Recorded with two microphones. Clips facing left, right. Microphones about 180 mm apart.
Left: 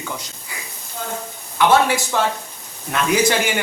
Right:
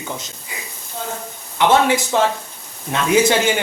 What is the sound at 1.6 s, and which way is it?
Speech, 20° right (ahead or behind).